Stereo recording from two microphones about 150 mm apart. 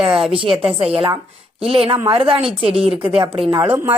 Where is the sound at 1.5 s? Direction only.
40° right (ahead or behind).